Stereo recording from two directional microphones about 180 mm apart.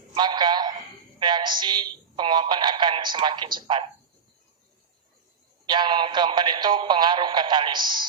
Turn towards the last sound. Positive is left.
turn(degrees=-25)  # may be behind; listen again after turning